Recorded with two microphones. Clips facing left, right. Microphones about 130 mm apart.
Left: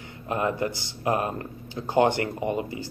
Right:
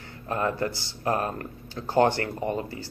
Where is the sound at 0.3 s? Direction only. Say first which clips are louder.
Left 1 dB; 15° left (ahead or behind).